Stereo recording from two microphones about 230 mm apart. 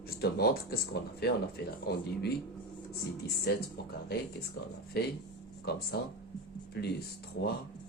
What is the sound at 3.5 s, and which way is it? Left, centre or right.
Speech, left.